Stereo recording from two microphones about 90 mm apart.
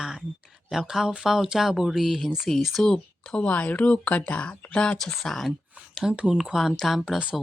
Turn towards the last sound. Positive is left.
turn(degrees=-10)  # may be behind; listen again after turning